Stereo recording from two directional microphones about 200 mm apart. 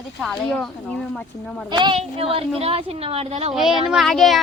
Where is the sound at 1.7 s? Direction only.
25° right (ahead or behind).